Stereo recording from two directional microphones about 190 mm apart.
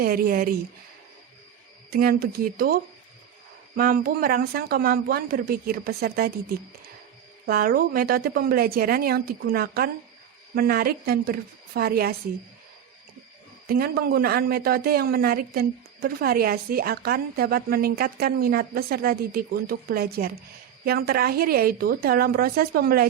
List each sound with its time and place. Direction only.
0.0 s speech: 50° right (ahead or behind)
1.9 s speech: 55° right (ahead or behind)
7.4 s speech: 50° right (ahead or behind)
13.7 s speech: 55° right (ahead or behind)